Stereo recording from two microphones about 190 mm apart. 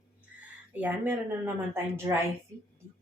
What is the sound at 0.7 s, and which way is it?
Speech, 10° right (ahead or behind).